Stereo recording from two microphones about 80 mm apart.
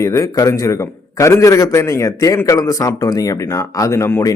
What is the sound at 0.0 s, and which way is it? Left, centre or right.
A man's voice, left.